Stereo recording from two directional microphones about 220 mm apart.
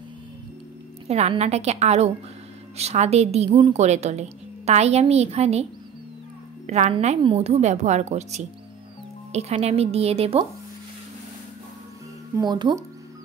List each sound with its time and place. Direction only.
1.0 s a woman's voice: 30° right (ahead or behind)
12.4 s a woman's voice: 20° right (ahead or behind)